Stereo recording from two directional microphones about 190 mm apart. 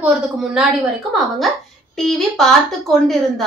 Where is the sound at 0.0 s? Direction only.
5° right (ahead or behind).